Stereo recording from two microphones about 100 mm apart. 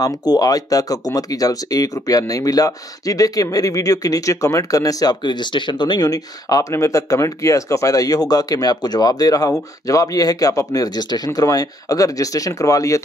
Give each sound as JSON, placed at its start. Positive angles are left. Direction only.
{"t": 0.0, "sound": "speech", "side_deg": 40}